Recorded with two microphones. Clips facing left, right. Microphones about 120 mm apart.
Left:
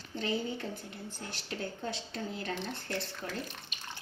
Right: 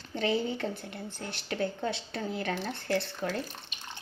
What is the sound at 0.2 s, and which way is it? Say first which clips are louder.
A woman's voice: right 5 dB; 70° right (ahead or behind).